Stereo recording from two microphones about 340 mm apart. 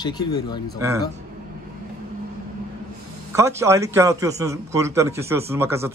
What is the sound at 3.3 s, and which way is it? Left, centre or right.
A man's voice, centre.